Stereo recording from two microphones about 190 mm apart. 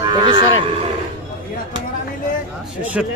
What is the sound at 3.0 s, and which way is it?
Speech, 5° right (ahead or behind).